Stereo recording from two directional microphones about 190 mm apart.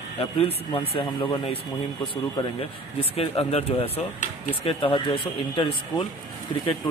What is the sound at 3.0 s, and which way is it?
Speech, 30° left (ahead or behind).